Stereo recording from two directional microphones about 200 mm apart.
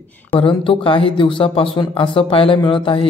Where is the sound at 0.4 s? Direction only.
25° left (ahead or behind).